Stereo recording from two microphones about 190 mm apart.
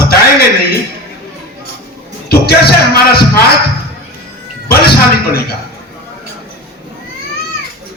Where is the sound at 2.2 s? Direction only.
55° left (ahead or behind).